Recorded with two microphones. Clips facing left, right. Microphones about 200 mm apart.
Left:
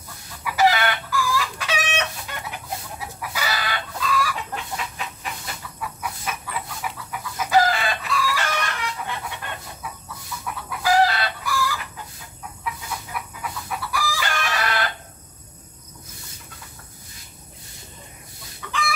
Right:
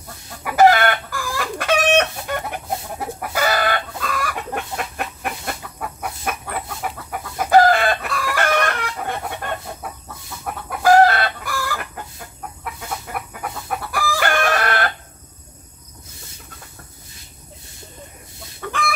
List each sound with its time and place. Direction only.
0.4 s chicken: 55° right (ahead or behind)
18.6 s chicken: 50° right (ahead or behind)